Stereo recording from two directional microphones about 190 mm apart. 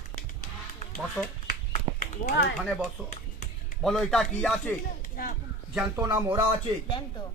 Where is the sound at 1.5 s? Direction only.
45° left (ahead or behind).